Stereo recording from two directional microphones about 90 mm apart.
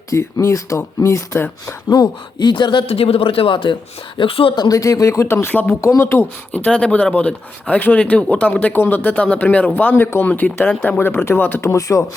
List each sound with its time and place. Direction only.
0.1 s speech: 35° left (ahead or behind)
1.9 s speech: 55° left (ahead or behind)
4.2 s speech: 90° left
4.5 s speech: 50° left (ahead or behind)
4.8 s speech: 40° left (ahead or behind); by 5.7 s 20° left (ahead or behind)
5.8 s speech: 30° left (ahead or behind)